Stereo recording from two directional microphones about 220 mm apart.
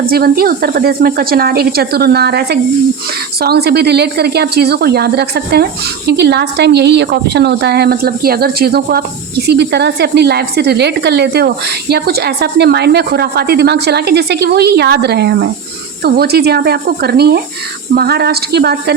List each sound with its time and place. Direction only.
0.0 s speech: 45° right (ahead or behind)